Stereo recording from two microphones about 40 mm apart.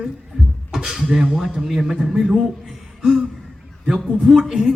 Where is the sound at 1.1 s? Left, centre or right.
Centre.